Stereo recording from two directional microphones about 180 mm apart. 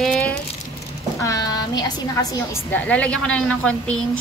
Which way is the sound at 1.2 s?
20° left (ahead or behind).